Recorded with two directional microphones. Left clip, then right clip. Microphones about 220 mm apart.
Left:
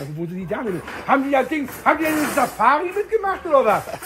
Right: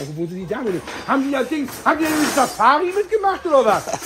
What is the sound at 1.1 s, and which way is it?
Speech, 15° right (ahead or behind).